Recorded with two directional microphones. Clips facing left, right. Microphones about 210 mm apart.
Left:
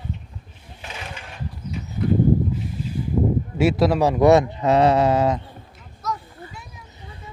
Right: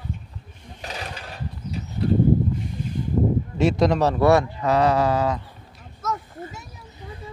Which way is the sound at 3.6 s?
5° left (ahead or behind).